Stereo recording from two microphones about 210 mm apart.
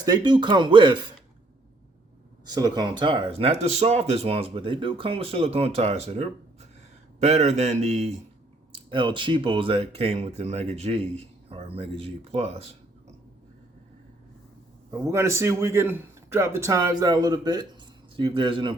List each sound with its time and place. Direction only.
0.0 s speech: 20° right (ahead or behind)
2.5 s a man's voice: 20° right (ahead or behind)
14.8 s a man's voice: 15° right (ahead or behind)